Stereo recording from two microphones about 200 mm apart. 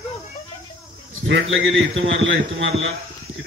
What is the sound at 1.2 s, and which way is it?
A man's voice, 75° right (ahead or behind).